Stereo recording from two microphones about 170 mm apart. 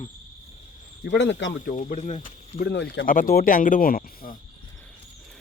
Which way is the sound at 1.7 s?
50° left (ahead or behind).